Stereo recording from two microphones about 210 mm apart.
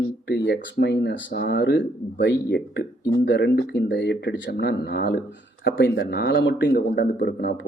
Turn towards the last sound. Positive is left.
turn(degrees=50)  # may be behind; listen again after turning